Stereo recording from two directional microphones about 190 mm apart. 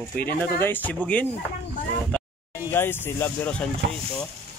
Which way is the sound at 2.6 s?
10° left (ahead or behind).